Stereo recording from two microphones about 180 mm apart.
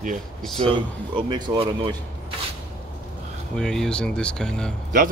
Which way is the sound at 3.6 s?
5° left (ahead or behind).